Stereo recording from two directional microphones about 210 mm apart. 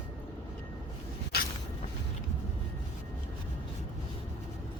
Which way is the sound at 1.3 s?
50° left (ahead or behind).